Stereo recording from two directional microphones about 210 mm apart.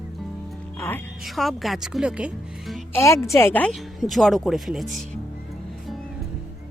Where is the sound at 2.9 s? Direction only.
15° left (ahead or behind).